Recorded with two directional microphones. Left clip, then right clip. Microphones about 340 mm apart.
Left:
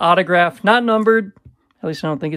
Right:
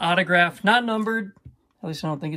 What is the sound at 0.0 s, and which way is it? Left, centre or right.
Speech, centre.